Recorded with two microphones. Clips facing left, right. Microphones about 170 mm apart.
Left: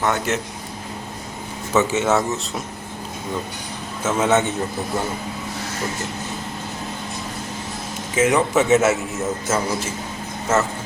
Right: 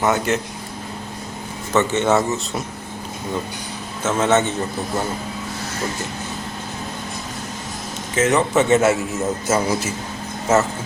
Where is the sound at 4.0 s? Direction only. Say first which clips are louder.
Right 1 dB; 10° left (ahead or behind).